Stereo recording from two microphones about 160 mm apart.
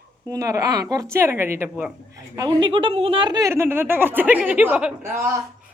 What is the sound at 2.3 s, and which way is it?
A woman's voice, 25° right (ahead or behind).